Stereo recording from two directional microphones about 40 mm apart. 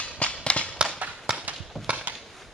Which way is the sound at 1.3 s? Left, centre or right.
Centre.